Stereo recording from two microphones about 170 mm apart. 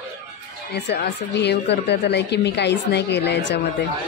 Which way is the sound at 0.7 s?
80° left.